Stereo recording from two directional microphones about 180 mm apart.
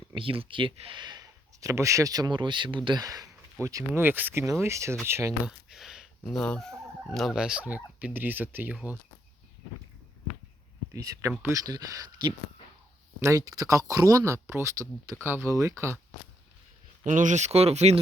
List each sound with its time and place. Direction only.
0.1 s speech: 30° right (ahead or behind); by 5.3 s 15° right (ahead or behind)
5.5 s speech: centre (ahead or behind)
10.9 s speech: 15° right (ahead or behind)
17.0 s speech: 45° right (ahead or behind)